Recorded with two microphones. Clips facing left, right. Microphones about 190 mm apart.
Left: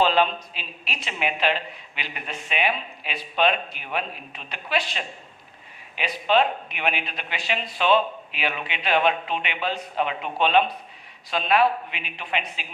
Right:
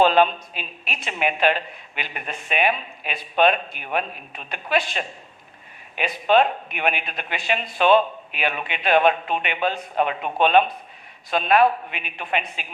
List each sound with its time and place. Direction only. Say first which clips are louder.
0.0 s speech: right 4 dB; 50° right (ahead or behind)